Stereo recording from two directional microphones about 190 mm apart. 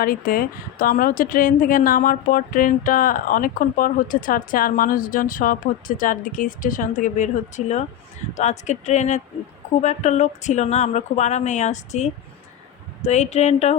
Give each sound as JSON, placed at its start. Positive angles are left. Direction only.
{"t": 0.0, "sound": "a woman's voice", "side_deg": 50}